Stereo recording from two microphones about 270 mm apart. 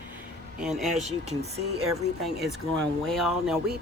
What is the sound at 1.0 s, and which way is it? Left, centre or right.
Speech, right.